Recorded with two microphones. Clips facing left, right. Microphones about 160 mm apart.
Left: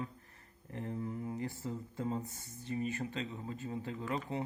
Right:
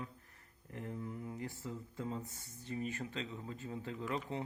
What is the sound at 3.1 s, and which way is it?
Speech, 25° left (ahead or behind).